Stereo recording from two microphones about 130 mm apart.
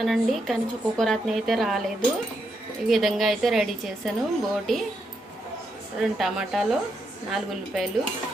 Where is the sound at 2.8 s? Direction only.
Centre (ahead or behind).